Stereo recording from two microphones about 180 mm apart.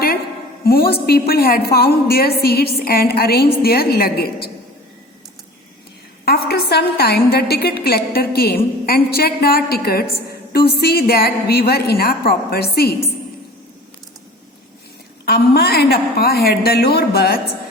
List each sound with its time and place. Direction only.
0.6 s a woman's voice: 60° left (ahead or behind)
6.2 s a woman's voice: 60° left (ahead or behind)
15.3 s a woman's voice: 60° left (ahead or behind)